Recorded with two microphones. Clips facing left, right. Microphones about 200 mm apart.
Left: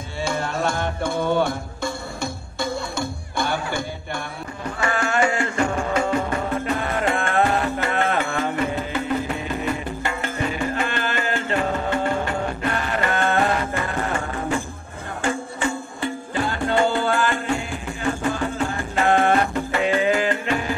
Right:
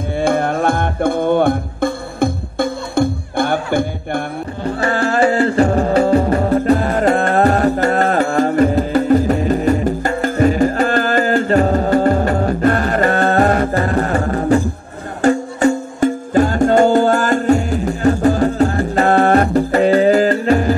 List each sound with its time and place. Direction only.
0.2 s music: 55° right (ahead or behind)
4.6 s music: 35° right (ahead or behind)